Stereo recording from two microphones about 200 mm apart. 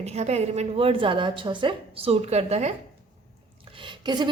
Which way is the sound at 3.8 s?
25° right (ahead or behind).